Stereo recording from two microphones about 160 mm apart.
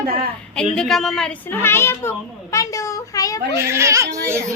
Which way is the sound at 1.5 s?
15° left (ahead or behind).